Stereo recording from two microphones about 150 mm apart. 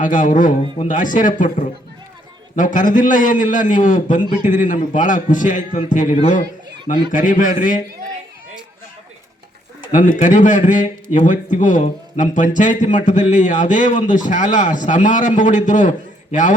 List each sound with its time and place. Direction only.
0.0 s a man's voice: 60° left (ahead or behind)
2.6 s a man's voice: 60° left (ahead or behind)
9.9 s a man's voice: 55° left (ahead or behind)